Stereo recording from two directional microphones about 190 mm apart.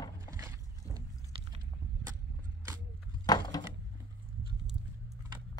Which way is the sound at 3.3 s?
20° left (ahead or behind).